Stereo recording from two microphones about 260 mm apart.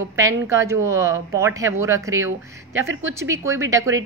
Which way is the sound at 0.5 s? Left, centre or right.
Centre.